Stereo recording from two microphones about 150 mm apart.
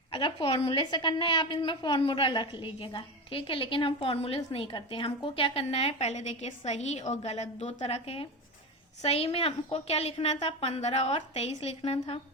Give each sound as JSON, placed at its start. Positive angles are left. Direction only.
{"t": 0.1, "sound": "a woman's voice", "side_deg": 30}